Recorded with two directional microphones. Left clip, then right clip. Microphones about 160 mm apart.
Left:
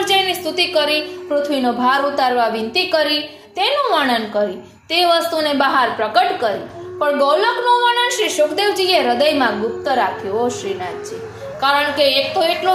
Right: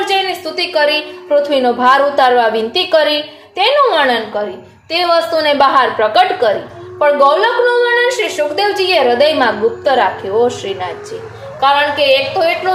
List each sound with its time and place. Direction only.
0.0 s a sound: 40° left (ahead or behind)
1.3 s a woman's voice: 10° left (ahead or behind)
3.6 s a woman's voice: 20° left (ahead or behind)
4.9 s a woman's voice: 35° left (ahead or behind); by 6.5 s 5° left (ahead or behind)
7.0 s a woman's voice: 25° left (ahead or behind)
8.0 s a woman's voice: 40° left (ahead or behind)
9.0 s a woman's voice: 20° left (ahead or behind)
9.8 s a woman's voice: centre (ahead or behind)
11.6 s a woman's voice: 35° left (ahead or behind)